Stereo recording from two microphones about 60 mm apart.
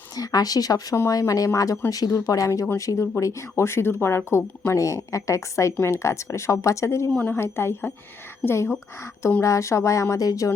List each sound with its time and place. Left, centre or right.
0.2 s speech: left
1.0 s speech: left
1.5 s speech: left
1.9 s speech: left
2.1 s speech: left
4.8 s a sound: left
5.8 s speech: left
7.3 s speech: left
9.4 s a sound: left